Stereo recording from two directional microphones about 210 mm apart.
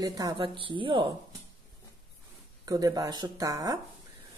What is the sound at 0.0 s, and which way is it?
A woman's voice, 15° right (ahead or behind).